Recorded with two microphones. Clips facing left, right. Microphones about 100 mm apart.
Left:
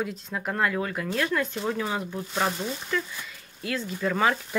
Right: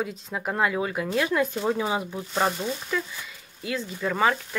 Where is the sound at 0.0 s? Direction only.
5° right (ahead or behind).